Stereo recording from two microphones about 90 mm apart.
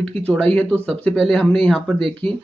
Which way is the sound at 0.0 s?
10° left (ahead or behind).